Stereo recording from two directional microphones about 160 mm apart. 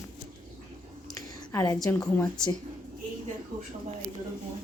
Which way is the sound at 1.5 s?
20° left (ahead or behind).